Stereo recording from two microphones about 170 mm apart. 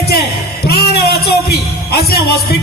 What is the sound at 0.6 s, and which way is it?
A man's voice, 65° left (ahead or behind).